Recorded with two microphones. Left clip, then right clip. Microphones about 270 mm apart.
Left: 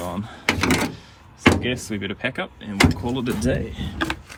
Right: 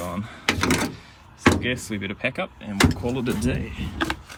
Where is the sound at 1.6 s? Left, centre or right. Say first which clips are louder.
Left 1 dB; right.